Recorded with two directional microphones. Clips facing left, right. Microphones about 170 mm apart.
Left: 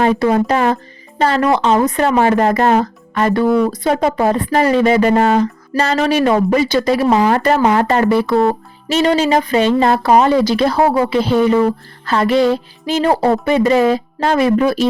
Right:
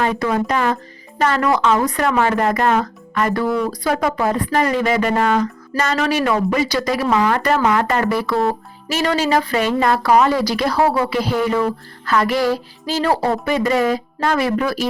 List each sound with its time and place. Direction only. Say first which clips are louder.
0.0 s speech: left 5 dB; 30° left (ahead or behind)